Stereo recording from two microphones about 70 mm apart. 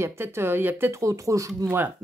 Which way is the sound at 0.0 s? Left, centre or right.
Right.